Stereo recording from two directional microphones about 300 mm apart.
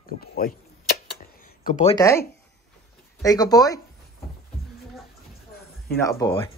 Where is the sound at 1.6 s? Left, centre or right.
Left.